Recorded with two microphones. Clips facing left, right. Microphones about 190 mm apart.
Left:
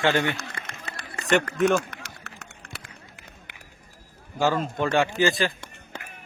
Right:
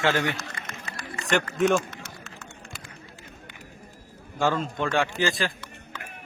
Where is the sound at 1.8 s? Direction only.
65° left (ahead or behind).